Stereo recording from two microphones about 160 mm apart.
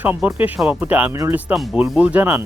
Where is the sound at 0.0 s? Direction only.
10° right (ahead or behind).